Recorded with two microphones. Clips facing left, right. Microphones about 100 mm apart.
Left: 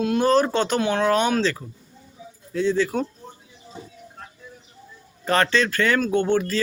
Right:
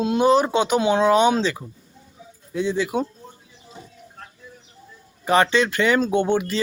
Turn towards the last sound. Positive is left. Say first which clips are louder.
# even
turn(degrees=-15)  # may be behind; listen again after turning